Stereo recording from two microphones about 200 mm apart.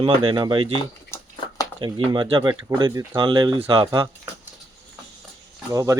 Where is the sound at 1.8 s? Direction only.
25° right (ahead or behind).